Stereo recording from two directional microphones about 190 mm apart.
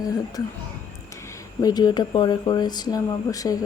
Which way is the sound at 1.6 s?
20° left (ahead or behind).